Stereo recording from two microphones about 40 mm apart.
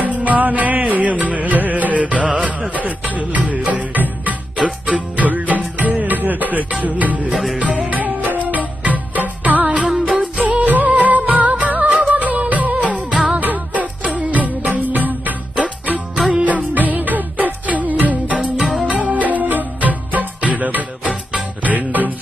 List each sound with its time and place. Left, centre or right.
0.0 s music: right
4.6 s music: right
10.7 s music of bollywood: right
13.3 s music: right
15.5 s music: right
18.5 s music: centre
18.8 s music: right